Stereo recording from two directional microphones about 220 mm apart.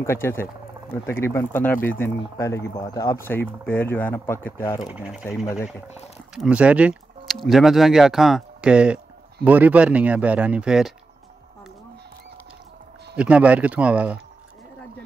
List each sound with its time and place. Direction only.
0.0 s speech: 10° left (ahead or behind)
4.8 s speech: 5° right (ahead or behind)
6.3 s speech: 5° right (ahead or behind)
13.1 s speech: 5° right (ahead or behind)